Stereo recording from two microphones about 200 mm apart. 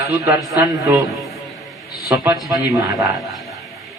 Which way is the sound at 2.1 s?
15° right (ahead or behind).